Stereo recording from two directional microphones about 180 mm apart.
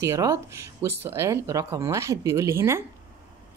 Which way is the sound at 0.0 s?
15° right (ahead or behind).